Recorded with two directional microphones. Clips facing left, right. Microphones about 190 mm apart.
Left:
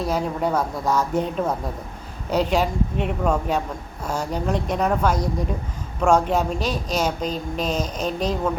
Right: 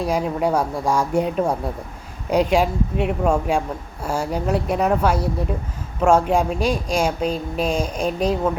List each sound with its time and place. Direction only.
0.0 s a woman's voice: 10° right (ahead or behind)